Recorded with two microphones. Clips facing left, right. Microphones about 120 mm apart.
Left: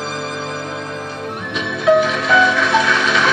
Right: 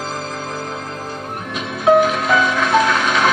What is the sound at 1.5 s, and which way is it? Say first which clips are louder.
Music: even; 45° right (ahead or behind).